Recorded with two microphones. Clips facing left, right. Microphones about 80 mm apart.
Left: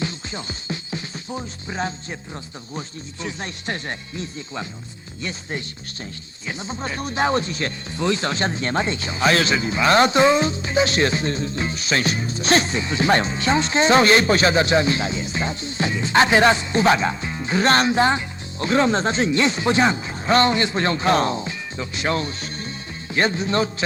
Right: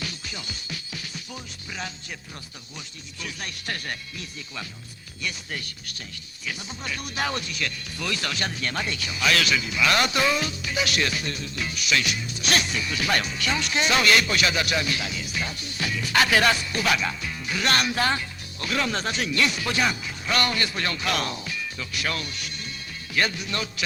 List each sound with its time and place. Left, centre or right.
0.0 s music: left
2.7 s speech: left